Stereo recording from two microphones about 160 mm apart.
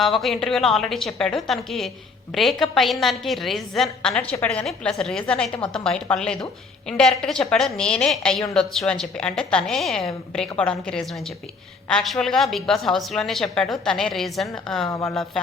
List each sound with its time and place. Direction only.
0.0 s a woman's voice: centre (ahead or behind)
5.5 s a woman's voice: 35° left (ahead or behind)
5.8 s a woman's voice: 5° left (ahead or behind)